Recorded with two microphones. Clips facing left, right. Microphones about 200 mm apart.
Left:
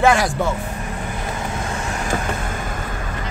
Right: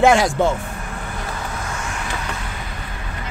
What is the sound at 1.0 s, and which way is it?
Vehicle, 20° left (ahead or behind).